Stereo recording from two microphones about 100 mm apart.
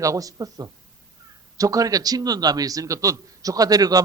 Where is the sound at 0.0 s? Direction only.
35° right (ahead or behind).